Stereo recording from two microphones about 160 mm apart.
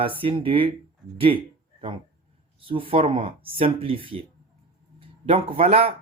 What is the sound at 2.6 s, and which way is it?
Speech, 35° right (ahead or behind).